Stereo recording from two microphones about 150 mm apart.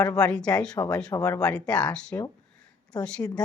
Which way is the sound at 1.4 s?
5° left (ahead or behind).